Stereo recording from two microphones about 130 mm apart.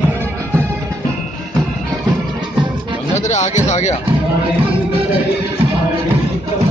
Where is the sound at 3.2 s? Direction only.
65° left (ahead or behind).